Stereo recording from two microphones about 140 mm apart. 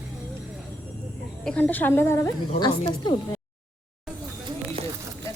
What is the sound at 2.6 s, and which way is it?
Speech, 30° left (ahead or behind).